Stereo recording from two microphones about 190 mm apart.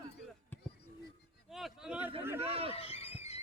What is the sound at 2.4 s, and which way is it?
Speech, 30° right (ahead or behind).